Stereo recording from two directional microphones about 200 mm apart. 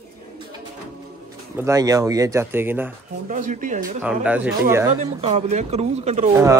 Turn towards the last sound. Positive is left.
turn(degrees=-15)  # may be behind; listen again after turning